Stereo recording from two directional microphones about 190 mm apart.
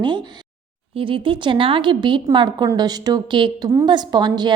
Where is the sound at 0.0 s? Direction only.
25° right (ahead or behind).